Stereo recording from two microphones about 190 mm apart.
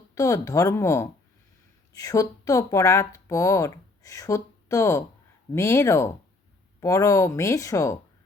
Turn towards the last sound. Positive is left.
turn(degrees=15)  # may be behind; listen again after turning